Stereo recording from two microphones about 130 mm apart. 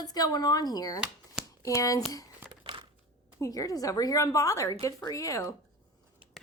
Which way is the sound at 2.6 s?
40° right (ahead or behind).